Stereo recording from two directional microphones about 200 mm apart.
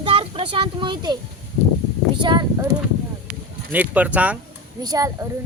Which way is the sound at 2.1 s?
25° right (ahead or behind).